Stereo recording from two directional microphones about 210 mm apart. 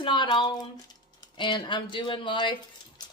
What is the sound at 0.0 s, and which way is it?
Speech, 20° left (ahead or behind).